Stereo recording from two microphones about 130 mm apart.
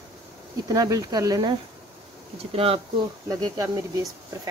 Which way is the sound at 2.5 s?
45° right (ahead or behind).